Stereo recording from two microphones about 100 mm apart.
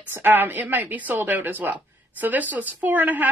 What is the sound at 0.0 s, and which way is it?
Speech, 20° right (ahead or behind).